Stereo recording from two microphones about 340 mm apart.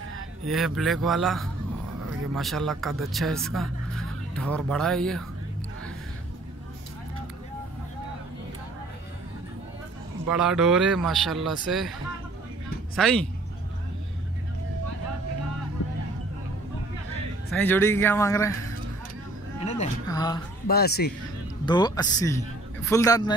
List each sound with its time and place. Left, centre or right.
0.5 s speech: centre
10.3 s speech: centre
12.9 s speech: centre
17.5 s speech: centre
19.6 s speech: centre
20.6 s speech: left
21.6 s speech: centre